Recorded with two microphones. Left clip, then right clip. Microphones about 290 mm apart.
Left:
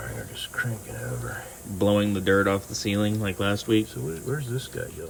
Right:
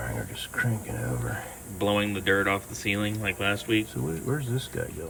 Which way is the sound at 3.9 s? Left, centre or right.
Centre.